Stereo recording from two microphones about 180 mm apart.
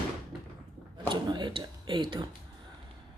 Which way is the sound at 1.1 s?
25° right (ahead or behind).